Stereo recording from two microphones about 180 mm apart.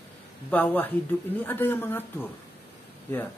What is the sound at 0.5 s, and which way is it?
Speech, 10° left (ahead or behind).